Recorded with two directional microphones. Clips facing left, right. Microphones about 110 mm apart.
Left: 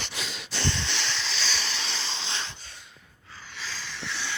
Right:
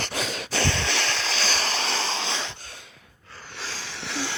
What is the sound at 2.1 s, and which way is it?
Wheeze, 85° right.